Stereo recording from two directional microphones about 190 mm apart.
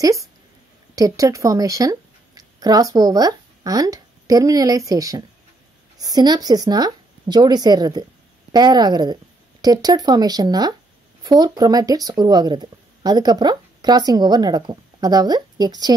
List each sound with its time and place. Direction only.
0.9 s speech: 20° right (ahead or behind)